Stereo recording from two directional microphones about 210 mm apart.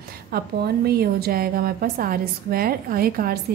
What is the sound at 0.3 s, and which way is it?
A woman's voice, 45° right (ahead or behind).